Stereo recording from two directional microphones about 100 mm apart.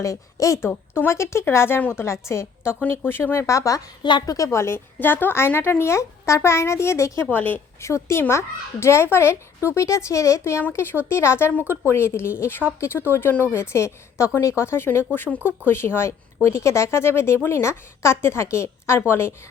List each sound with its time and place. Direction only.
0.0 s a woman's voice: 35° left (ahead or behind)
3.4 s a woman's voice: 30° left (ahead or behind); by 7.6 s 15° left (ahead or behind)
7.8 s speech: 30° left (ahead or behind)